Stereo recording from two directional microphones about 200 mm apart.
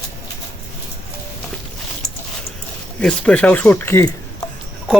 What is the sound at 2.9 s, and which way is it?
Speech, 5° left (ahead or behind).